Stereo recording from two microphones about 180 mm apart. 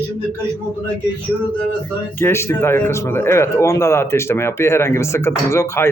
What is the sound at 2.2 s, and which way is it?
A man's voice, 15° left (ahead or behind).